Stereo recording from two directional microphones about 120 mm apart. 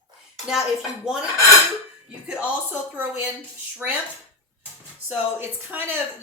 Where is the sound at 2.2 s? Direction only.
10° right (ahead or behind).